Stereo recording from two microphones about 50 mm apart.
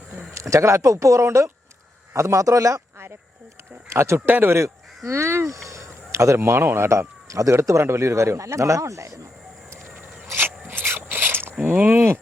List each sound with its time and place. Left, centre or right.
0.5 s speech: right
3.8 s speech: right
5.6 s speech: right
6.8 s speech: right
7.6 s speech: right
10.3 s a sound: right
11.6 s speech: right